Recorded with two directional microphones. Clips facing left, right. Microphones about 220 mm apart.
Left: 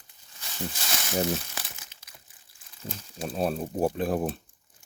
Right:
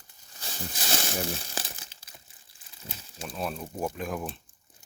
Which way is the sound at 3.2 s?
35° left (ahead or behind).